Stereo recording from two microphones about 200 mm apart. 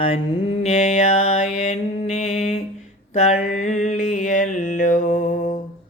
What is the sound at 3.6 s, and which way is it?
Mantra, 35° left (ahead or behind).